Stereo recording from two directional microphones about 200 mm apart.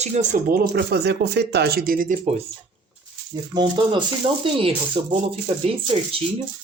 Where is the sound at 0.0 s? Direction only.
35° right (ahead or behind).